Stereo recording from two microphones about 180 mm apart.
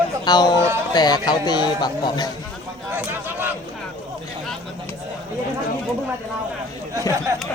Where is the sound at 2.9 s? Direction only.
10° right (ahead or behind).